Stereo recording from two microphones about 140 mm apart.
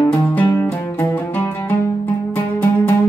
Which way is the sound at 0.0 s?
10° left (ahead or behind).